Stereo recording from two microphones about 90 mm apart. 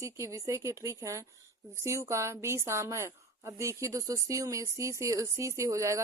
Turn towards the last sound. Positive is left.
turn(degrees=-35)  # may be behind; listen again after turning